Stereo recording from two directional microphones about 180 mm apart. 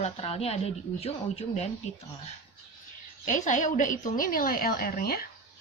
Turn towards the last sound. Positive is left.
turn(degrees=55)  # may be behind; listen again after turning